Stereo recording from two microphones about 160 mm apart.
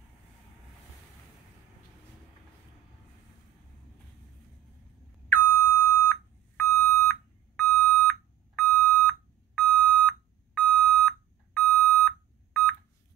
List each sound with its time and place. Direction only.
5.3 s beep: 20° left (ahead or behind)